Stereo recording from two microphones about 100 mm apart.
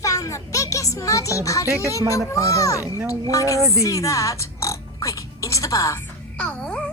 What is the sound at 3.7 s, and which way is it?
Music, 30° left (ahead or behind).